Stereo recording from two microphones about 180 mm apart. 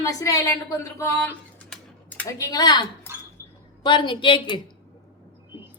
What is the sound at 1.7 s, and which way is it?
Computer keyboard, 10° left (ahead or behind).